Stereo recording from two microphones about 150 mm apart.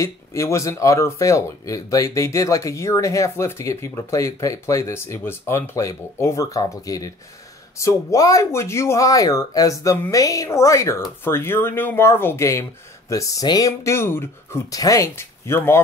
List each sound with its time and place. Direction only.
0.0 s speech: 20° left (ahead or behind)